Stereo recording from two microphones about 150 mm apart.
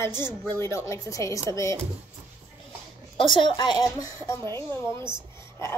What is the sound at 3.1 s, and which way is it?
Speech, 35° left (ahead or behind).